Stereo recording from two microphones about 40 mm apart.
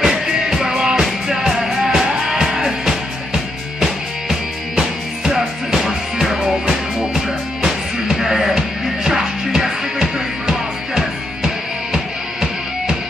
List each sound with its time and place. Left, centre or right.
0.0 s music: centre